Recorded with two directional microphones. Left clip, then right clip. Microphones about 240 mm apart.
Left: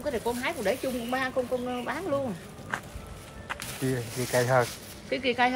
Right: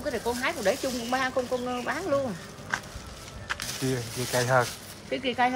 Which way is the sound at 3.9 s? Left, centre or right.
Centre.